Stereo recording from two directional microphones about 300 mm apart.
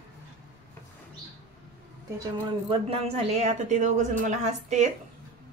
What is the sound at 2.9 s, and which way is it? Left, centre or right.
A woman's voice, right.